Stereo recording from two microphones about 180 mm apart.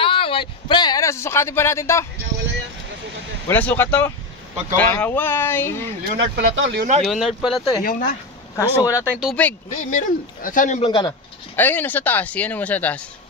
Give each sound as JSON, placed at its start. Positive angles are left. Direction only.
{"t": 0.0, "sound": "speech", "side_deg": 30}
{"t": 3.4, "sound": "speech", "side_deg": 10}
{"t": 6.0, "sound": "speech", "side_deg": -80}
{"t": 7.0, "sound": "speech", "side_deg": 0}
{"t": 7.8, "sound": "speech", "side_deg": 50}
{"t": 8.5, "sound": "speech", "side_deg": 20}
{"t": 9.0, "sound": "speech", "side_deg": -5}
{"t": 9.8, "sound": "speech", "side_deg": 45}
{"t": 10.9, "sound": "speech", "side_deg": 25}
{"t": 11.5, "sound": "speech", "side_deg": 10}